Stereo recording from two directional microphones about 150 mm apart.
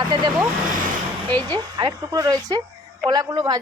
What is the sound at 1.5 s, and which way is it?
Speech, 25° right (ahead or behind).